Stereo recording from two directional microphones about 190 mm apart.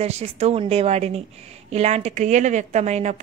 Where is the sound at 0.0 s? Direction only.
35° right (ahead or behind).